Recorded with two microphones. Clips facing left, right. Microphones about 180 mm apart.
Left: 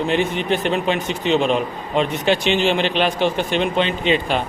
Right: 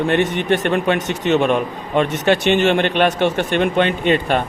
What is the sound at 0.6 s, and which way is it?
Speech, 55° right (ahead or behind).